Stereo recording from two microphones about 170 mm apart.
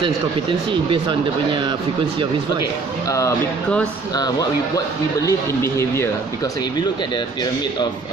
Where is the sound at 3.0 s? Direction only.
20° left (ahead or behind).